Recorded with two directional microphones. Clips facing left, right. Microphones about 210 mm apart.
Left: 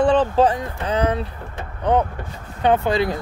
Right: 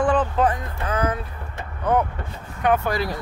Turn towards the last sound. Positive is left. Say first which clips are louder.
# left 3 dB
turn(degrees=20)  # may be behind; listen again after turning